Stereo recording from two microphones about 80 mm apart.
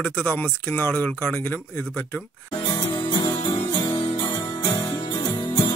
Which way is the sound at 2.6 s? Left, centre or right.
Left.